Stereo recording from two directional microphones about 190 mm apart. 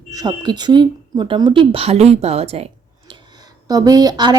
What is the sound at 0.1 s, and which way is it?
Speech, 20° right (ahead or behind).